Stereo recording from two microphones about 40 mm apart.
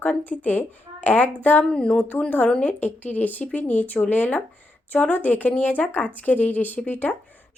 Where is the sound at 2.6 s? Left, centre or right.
Left.